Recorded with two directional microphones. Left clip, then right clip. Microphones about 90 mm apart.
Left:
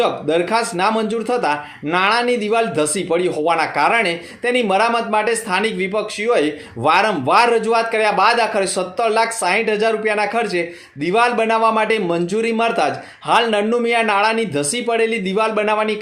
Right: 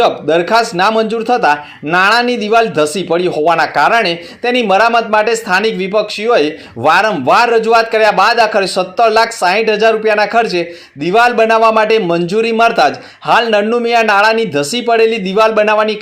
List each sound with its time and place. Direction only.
0.0 s speech: 25° right (ahead or behind)